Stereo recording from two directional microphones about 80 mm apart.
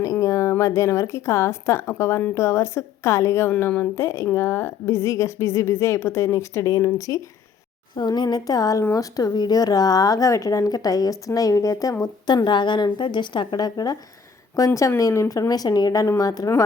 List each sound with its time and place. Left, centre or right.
0.0 s a sound: left
0.5 s a woman's voice: left
3.5 s a woman's voice: left
7.9 s speech: left
12.5 s a woman's voice: left
15.3 s speech: left